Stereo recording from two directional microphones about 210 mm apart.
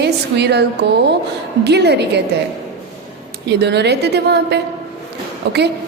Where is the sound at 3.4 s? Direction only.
55° right (ahead or behind).